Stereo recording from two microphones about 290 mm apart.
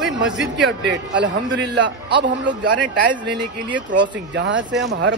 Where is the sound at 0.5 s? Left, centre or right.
Right.